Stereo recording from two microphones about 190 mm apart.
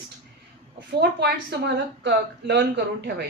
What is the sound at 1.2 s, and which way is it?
Speech, 65° right (ahead or behind).